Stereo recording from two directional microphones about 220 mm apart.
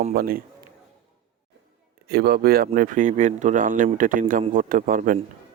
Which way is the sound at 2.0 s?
45° right (ahead or behind).